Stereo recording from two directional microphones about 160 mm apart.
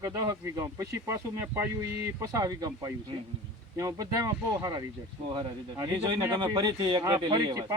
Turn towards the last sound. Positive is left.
turn(degrees=-30)  # may be behind; listen again after turning